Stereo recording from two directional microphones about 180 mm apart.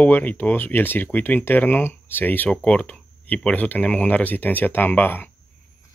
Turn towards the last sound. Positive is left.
turn(degrees=10)  # may be behind; listen again after turning